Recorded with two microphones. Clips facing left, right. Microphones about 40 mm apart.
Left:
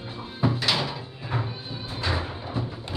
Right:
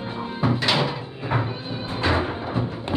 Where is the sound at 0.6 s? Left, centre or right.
Right.